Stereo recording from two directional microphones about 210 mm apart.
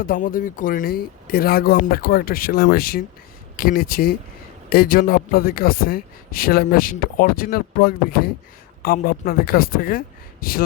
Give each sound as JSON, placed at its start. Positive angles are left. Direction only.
{"t": 0.0, "sound": "a man's voice", "side_deg": 40}